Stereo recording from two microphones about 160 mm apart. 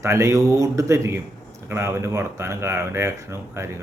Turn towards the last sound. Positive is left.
turn(degrees=-15)  # may be behind; listen again after turning